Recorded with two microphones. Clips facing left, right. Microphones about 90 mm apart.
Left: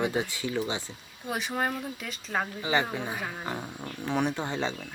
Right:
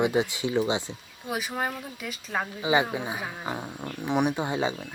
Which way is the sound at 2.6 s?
15° right (ahead or behind).